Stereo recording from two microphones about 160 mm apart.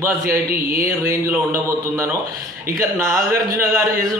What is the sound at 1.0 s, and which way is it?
A man's voice, 15° right (ahead or behind).